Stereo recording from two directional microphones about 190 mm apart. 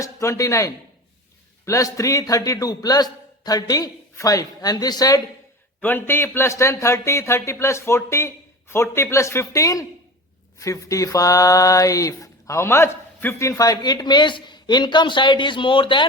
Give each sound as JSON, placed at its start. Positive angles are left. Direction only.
{"t": 0.0, "sound": "a man's voice", "side_deg": 15}